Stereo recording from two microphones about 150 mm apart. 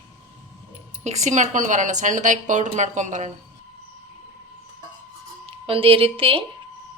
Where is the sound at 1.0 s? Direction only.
50° right (ahead or behind).